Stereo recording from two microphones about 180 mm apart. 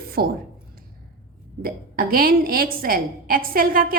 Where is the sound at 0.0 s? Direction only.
55° right (ahead or behind).